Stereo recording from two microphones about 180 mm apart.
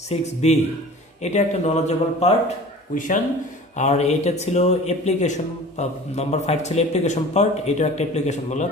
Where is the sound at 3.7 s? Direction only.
40° left (ahead or behind).